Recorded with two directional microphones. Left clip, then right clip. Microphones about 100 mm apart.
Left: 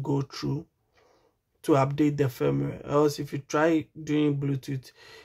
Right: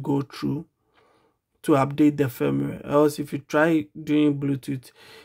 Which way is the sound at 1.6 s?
40° right (ahead or behind).